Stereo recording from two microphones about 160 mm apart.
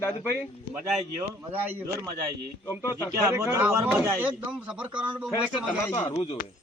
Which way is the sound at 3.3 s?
20° right (ahead or behind).